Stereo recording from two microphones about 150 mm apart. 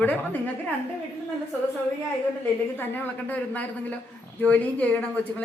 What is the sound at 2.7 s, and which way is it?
A woman's voice, 10° left (ahead or behind).